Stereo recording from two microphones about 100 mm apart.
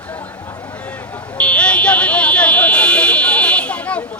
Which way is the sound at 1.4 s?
10° left (ahead or behind).